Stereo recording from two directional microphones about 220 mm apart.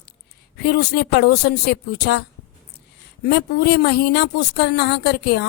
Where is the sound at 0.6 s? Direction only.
50° left (ahead or behind).